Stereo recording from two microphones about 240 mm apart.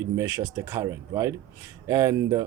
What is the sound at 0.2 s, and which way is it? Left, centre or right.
Speech, centre.